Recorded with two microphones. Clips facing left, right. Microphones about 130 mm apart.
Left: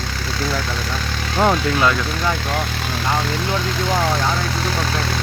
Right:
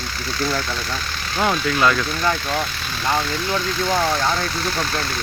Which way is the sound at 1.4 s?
25° left (ahead or behind).